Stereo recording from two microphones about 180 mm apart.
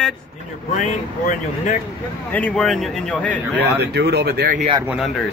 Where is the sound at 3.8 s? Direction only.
65° right (ahead or behind).